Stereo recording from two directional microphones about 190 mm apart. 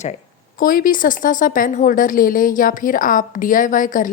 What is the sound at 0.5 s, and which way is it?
Speech, 50° left (ahead or behind).